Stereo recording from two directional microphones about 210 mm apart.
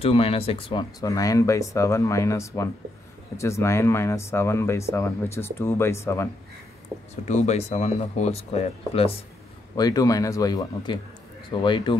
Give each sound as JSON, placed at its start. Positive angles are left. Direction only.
{"t": 0.0, "sound": "speech", "side_deg": 25}
{"t": 7.2, "sound": "speech", "side_deg": 30}
{"t": 9.8, "sound": "speech", "side_deg": 15}